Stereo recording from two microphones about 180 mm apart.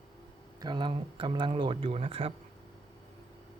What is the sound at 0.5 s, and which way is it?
Speech, 25° right (ahead or behind).